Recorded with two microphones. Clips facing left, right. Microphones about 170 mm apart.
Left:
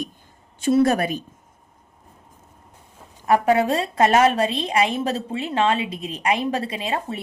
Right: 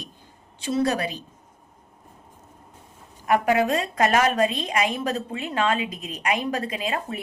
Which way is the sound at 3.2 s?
30° left (ahead or behind).